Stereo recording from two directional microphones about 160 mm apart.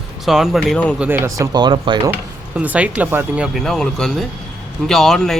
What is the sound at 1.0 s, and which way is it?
Speech, 15° right (ahead or behind).